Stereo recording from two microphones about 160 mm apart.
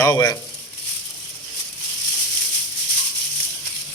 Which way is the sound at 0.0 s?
20° left (ahead or behind).